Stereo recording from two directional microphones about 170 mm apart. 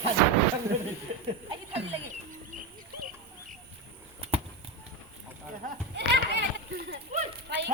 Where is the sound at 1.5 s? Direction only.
35° right (ahead or behind).